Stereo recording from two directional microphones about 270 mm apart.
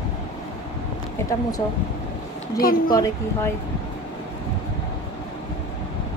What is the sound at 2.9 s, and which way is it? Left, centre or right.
Speech, centre.